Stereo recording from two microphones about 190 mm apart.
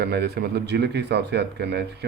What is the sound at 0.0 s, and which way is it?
Speech, 60° right (ahead or behind).